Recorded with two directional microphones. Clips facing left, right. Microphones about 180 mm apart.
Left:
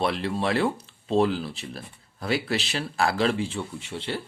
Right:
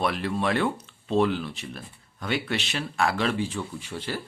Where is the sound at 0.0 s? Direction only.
30° left (ahead or behind).